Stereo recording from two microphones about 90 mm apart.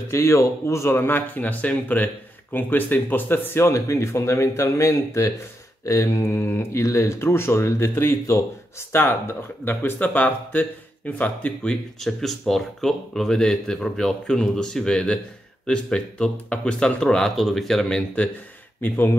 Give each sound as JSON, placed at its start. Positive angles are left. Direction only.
{"t": 0.1, "sound": "speech", "side_deg": 35}
{"t": 18.8, "sound": "speech", "side_deg": 25}